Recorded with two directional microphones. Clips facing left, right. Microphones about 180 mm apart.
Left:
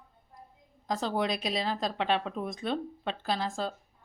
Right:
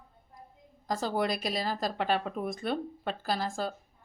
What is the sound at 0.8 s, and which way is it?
Speech, 5° right (ahead or behind).